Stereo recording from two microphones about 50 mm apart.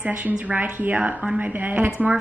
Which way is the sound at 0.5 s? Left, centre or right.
Right.